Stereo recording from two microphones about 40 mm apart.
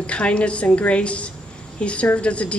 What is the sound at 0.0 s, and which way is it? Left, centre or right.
A woman's voice, left.